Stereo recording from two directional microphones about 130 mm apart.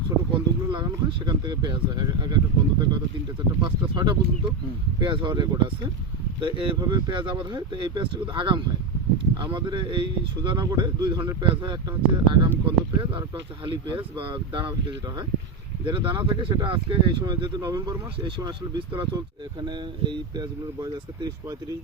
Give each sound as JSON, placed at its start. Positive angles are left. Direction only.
{"t": 0.3, "sound": "speech", "side_deg": -35}